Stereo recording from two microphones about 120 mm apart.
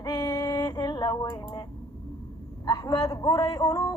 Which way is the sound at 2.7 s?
30° left (ahead or behind).